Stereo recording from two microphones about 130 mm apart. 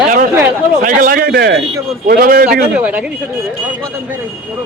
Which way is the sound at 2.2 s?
90° right.